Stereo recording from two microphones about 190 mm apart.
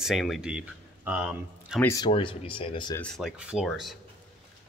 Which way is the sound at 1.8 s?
15° left (ahead or behind).